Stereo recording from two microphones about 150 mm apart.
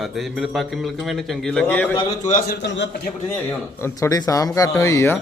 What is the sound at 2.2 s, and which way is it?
Speech, 60° left (ahead or behind).